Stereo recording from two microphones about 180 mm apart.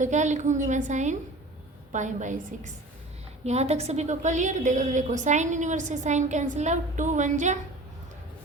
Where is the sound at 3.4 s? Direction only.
35° right (ahead or behind).